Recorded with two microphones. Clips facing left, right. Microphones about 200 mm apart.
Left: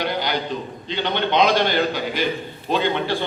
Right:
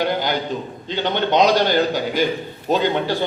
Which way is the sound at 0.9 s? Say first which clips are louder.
Right 2 dB; 45° right (ahead or behind).